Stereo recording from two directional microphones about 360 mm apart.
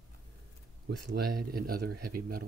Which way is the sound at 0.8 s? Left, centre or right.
Right.